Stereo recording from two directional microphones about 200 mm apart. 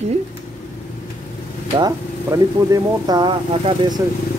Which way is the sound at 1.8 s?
20° right (ahead or behind).